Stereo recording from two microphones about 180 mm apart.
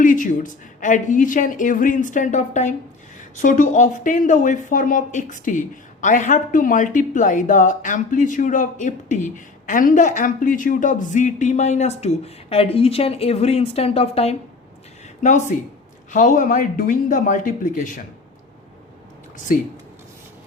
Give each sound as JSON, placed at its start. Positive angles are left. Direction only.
{"t": 0.0, "sound": "speech", "side_deg": 45}